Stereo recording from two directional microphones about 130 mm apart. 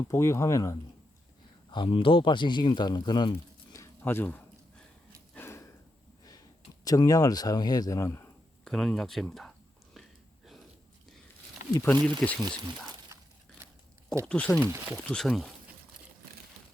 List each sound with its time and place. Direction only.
0.0 s speech: 20° left (ahead or behind)
1.7 s speech: 40° left (ahead or behind)
3.7 s a sound: 20° left (ahead or behind)
5.3 s snort: 20° left (ahead or behind)
6.8 s speech: 25° left (ahead or behind)
8.6 s speech: 5° left (ahead or behind)
9.9 s a sound: centre (ahead or behind)
11.7 s speech: 20° left (ahead or behind)
12.2 s speech: 10° left (ahead or behind)
14.3 s speech: 10° left (ahead or behind)
14.6 s speech: 15° right (ahead or behind)
14.9 s speech: 5° left (ahead or behind)